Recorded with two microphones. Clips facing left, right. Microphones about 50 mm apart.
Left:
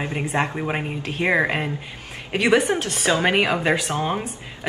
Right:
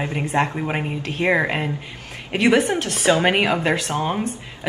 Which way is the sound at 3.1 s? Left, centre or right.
Right.